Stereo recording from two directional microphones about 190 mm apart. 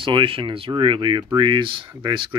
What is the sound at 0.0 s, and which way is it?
Speech, 25° right (ahead or behind).